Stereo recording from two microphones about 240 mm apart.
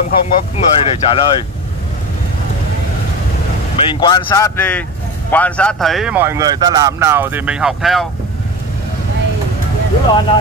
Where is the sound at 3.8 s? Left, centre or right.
Centre.